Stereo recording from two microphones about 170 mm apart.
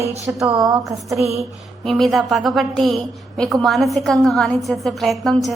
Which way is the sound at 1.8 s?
Centre (ahead or behind).